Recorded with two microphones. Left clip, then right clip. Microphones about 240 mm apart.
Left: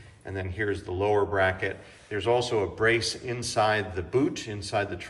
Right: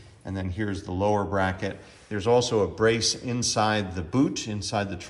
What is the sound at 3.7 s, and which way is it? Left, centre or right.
Speech, centre.